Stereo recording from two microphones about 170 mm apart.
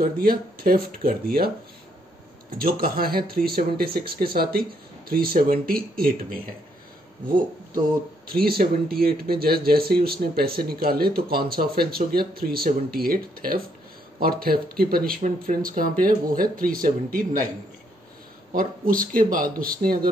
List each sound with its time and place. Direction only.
0.0 s speech: 60° right (ahead or behind)
2.5 s speech: 60° right (ahead or behind)
8.3 s speech: 65° right (ahead or behind)
18.5 s speech: 55° right (ahead or behind)